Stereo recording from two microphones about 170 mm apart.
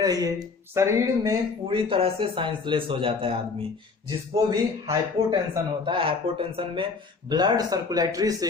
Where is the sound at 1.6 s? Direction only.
30° right (ahead or behind).